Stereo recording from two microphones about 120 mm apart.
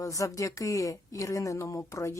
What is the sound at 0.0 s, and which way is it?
Speech, 25° left (ahead or behind).